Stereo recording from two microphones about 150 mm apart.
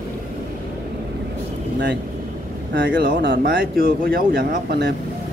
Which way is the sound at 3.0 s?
85° right.